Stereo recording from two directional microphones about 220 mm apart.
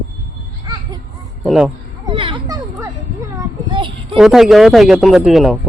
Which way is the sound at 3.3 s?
20° right (ahead or behind).